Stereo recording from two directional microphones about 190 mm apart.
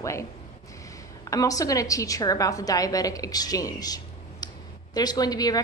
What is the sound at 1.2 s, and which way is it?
A woman's voice, 15° left (ahead or behind).